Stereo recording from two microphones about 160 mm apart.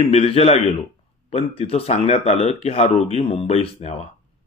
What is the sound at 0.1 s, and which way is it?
Speech, 40° left (ahead or behind).